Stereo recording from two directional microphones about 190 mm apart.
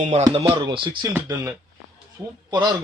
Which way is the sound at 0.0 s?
35° right (ahead or behind).